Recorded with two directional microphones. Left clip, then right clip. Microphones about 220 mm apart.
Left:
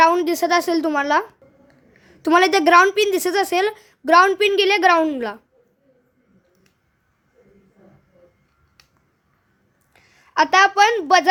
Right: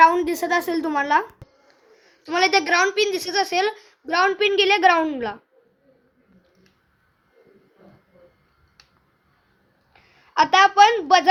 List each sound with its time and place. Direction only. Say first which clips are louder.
0.0 s a woman's voice: even; 20° left (ahead or behind); by 5.4 s 35° left (ahead or behind)
9.9 s a woman's voice: left 2 dB; 40° left (ahead or behind)